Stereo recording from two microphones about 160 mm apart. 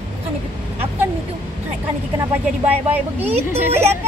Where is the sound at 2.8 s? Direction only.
10° right (ahead or behind).